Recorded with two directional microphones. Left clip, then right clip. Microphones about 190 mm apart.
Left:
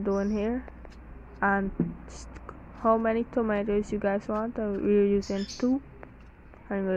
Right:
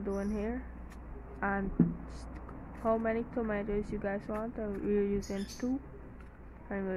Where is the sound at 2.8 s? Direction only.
15° left (ahead or behind).